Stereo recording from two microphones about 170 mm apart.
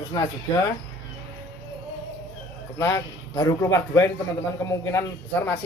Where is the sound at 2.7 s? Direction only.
15° left (ahead or behind).